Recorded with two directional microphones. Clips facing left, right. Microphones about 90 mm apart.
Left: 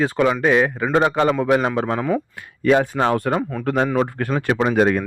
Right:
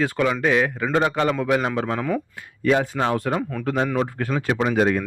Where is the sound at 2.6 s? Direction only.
50° left (ahead or behind).